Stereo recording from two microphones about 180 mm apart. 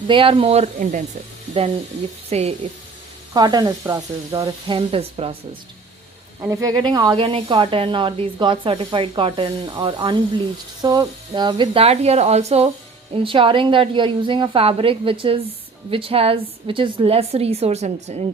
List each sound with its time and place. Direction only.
0.1 s a woman's voice: 30° right (ahead or behind)
2.3 s a woman's voice: 35° right (ahead or behind)
3.3 s speech: 20° right (ahead or behind)
6.4 s a woman's voice: 20° right (ahead or behind); by 18.2 s 35° right (ahead or behind)